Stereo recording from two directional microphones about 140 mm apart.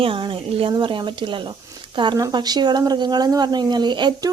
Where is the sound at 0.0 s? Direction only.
40° right (ahead or behind).